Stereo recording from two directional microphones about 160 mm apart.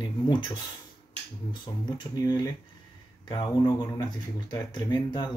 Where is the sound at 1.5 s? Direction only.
25° left (ahead or behind).